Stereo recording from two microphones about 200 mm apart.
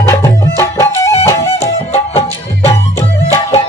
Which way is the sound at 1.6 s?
30° left (ahead or behind).